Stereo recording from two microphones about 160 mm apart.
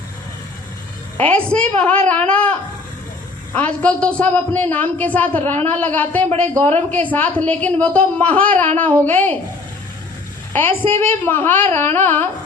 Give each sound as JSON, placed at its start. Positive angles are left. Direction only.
{"t": 1.1, "sound": "a man's voice", "side_deg": 10}
{"t": 2.0, "sound": "a sound", "side_deg": 10}
{"t": 3.5, "sound": "a man's voice", "side_deg": 10}
{"t": 10.5, "sound": "a man's voice", "side_deg": 10}